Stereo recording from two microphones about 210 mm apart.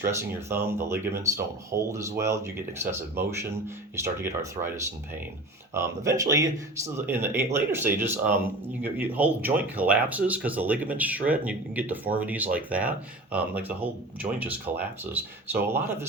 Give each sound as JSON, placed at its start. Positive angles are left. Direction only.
{"t": 0.0, "sound": "speech", "side_deg": -10}
{"t": 5.7, "sound": "speech", "side_deg": -15}